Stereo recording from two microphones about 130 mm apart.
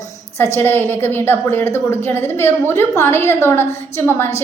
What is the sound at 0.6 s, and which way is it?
A woman's voice, 15° left (ahead or behind).